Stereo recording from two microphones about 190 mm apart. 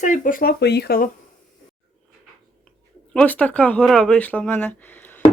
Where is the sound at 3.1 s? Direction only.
10° left (ahead or behind).